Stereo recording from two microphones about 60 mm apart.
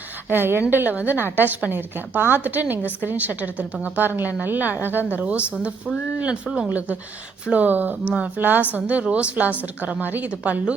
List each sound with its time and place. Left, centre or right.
0.3 s a woman's voice: right; by 6.7 s centre
6.7 s a woman's voice: right